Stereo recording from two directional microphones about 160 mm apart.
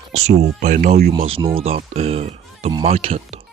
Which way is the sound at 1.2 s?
35° right (ahead or behind).